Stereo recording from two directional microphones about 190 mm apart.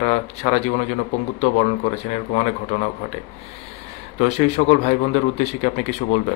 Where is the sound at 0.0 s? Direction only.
35° left (ahead or behind).